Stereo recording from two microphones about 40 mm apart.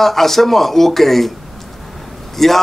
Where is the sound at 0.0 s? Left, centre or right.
Centre.